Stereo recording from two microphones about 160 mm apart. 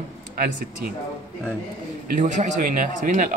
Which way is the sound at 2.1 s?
55° right (ahead or behind).